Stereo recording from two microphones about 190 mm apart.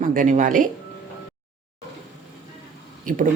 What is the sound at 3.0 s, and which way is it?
Speech, 45° right (ahead or behind).